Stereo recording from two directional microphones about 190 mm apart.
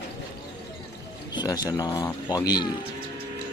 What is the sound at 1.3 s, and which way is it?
Speech, 20° left (ahead or behind).